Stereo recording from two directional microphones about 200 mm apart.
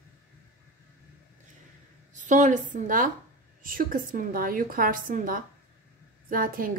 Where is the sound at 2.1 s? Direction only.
40° right (ahead or behind).